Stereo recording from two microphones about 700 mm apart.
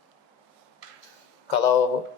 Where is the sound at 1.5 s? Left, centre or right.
Left.